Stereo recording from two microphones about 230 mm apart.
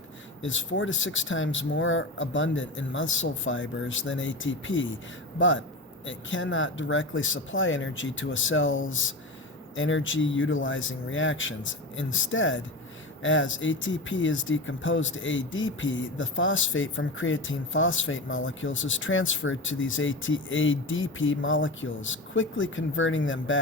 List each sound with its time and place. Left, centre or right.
0.4 s speech: left